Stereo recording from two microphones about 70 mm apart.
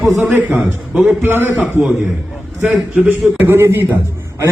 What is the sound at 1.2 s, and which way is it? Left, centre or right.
Speech, right.